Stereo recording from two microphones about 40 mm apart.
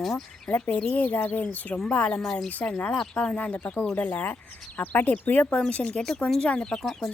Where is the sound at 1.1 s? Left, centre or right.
Left.